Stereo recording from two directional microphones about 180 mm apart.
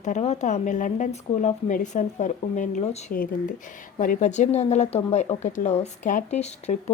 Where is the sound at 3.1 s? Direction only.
50° left (ahead or behind).